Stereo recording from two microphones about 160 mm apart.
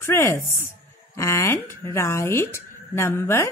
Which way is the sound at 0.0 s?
15° left (ahead or behind).